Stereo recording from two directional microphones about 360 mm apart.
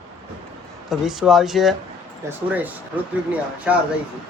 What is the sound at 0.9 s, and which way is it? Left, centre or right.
Speech, centre.